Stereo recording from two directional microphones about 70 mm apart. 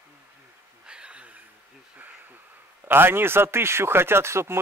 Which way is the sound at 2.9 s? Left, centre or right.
Right.